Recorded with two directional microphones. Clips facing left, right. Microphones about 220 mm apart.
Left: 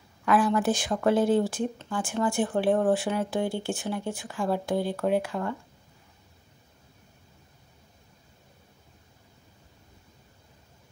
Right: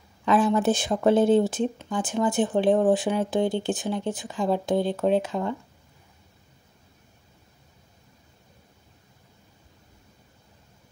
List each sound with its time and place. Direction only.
0.2 s speech: 20° right (ahead or behind)